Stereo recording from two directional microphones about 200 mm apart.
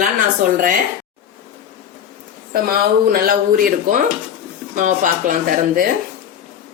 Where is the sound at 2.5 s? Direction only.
45° right (ahead or behind).